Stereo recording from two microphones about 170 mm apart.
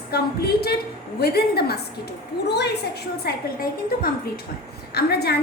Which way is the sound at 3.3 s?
70° left (ahead or behind).